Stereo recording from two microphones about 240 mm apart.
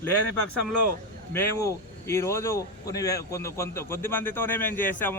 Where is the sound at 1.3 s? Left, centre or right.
Centre.